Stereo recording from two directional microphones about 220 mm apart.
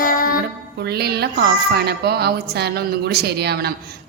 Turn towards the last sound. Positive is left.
turn(degrees=-45)  # may be behind; listen again after turning